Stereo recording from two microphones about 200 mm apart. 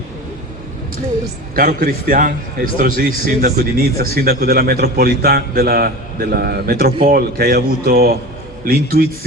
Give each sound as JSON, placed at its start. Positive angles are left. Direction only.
{"t": 1.5, "sound": "a man's voice", "side_deg": -45}